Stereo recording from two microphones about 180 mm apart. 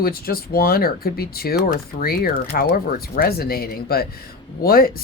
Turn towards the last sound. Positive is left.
turn(degrees=55)  # may be behind; listen again after turning